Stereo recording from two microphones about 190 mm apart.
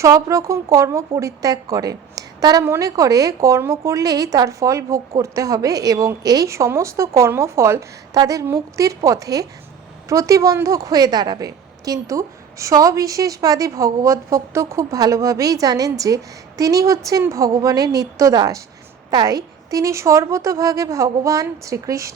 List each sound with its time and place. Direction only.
0.0 s a woman's voice: 15° right (ahead or behind)